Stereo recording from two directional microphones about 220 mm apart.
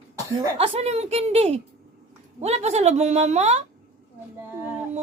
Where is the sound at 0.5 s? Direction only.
25° right (ahead or behind).